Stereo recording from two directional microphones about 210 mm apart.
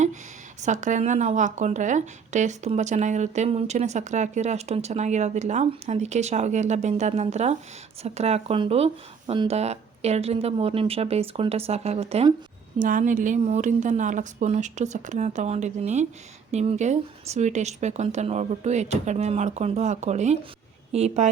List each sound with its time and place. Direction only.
0.6 s speech: 35° right (ahead or behind)